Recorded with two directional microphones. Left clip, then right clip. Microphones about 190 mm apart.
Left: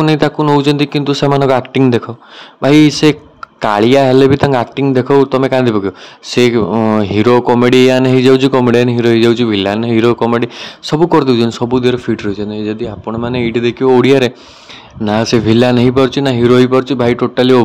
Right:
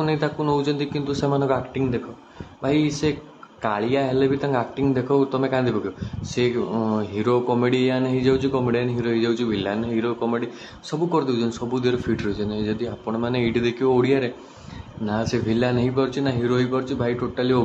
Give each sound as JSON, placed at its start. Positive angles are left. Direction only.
{"t": 0.0, "sound": "a man's voice", "side_deg": 40}